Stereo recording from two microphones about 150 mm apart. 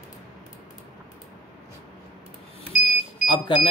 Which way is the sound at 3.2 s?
30° left (ahead or behind).